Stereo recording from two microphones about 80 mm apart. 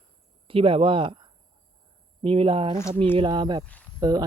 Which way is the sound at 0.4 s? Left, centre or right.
Right.